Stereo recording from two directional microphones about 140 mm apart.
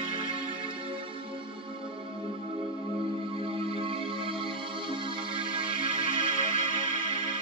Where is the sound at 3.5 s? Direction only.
40° right (ahead or behind).